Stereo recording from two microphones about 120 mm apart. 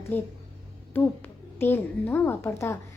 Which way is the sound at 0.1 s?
15° left (ahead or behind).